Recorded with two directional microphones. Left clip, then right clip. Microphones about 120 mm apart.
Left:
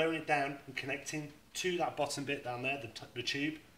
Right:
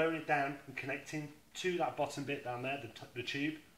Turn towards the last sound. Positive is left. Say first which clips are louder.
# left 2 dB
turn(degrees=20)  # may be behind; listen again after turning